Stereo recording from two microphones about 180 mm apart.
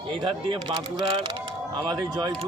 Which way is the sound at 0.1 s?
25° right (ahead or behind).